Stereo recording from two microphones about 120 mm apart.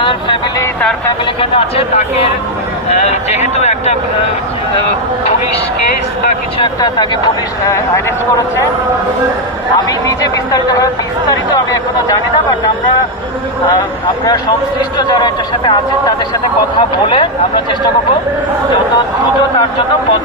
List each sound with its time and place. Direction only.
0.0 s a sound: 45° left (ahead or behind)
1.4 s speech: 55° left (ahead or behind)
3.1 s speech: 65° left (ahead or behind)
6.6 s a man's voice: 35° left (ahead or behind)
7.6 s speech: 25° left (ahead or behind)
9.7 s a man's voice: 30° left (ahead or behind)
14.9 s a man's voice: 35° left (ahead or behind)